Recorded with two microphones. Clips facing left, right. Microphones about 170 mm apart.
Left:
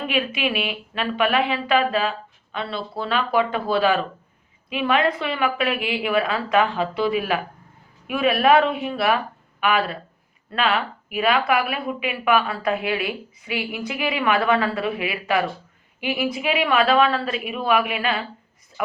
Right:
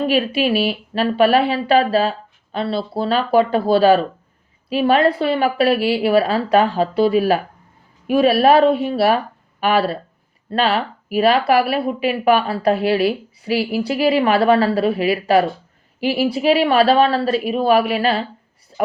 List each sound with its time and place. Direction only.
0.1 s speech: 35° right (ahead or behind)